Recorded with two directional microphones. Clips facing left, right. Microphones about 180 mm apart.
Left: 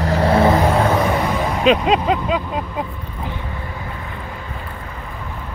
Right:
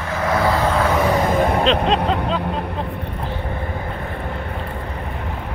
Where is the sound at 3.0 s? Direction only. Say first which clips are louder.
Right 2 dB; 50° right (ahead or behind).